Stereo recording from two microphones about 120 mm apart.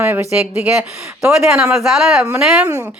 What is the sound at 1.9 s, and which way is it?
Speech, 5° right (ahead or behind).